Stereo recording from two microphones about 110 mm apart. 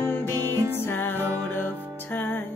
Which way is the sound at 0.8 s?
20° left (ahead or behind).